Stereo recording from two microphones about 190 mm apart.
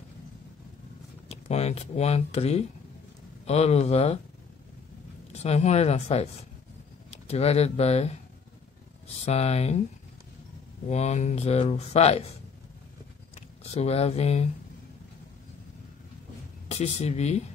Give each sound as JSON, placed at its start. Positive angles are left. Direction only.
{"t": 1.3, "sound": "speech", "side_deg": 35}
{"t": 5.3, "sound": "speech", "side_deg": 35}
{"t": 7.2, "sound": "speech", "side_deg": 35}
{"t": 10.9, "sound": "speech", "side_deg": 35}
{"t": 13.7, "sound": "speech", "side_deg": 35}
{"t": 16.6, "sound": "speech", "side_deg": 35}